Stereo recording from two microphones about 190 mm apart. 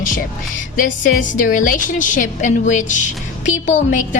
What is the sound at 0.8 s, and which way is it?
A woman's voice, 45° left (ahead or behind).